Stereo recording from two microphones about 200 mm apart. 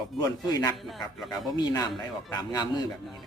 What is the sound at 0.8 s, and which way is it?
Speech, centre (ahead or behind).